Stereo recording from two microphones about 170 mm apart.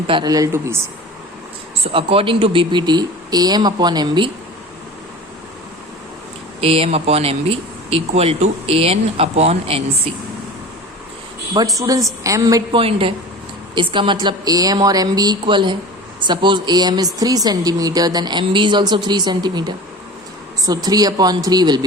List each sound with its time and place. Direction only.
0.1 s a woman's voice: 25° right (ahead or behind)
1.9 s a woman's voice: 30° right (ahead or behind)
6.6 s speech: 35° right (ahead or behind)
11.5 s a woman's voice: 20° right (ahead or behind)
12.8 s a woman's voice: 30° right (ahead or behind)